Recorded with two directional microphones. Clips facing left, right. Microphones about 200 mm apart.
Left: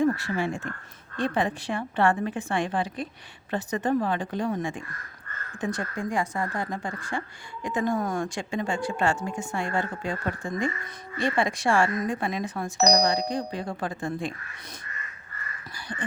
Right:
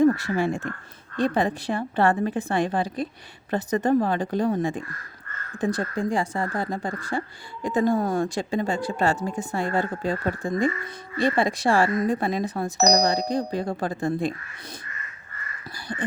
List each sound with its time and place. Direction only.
0.0 s speech: 40° right (ahead or behind)
15.9 s speech: 40° right (ahead or behind)